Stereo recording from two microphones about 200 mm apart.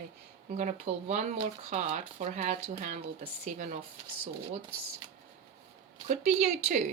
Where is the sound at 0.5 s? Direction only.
35° right (ahead or behind).